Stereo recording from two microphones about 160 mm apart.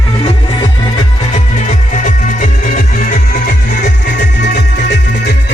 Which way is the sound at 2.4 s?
55° left (ahead or behind).